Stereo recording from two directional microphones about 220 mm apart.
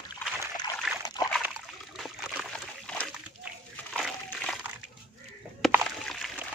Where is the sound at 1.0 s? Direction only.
15° left (ahead or behind).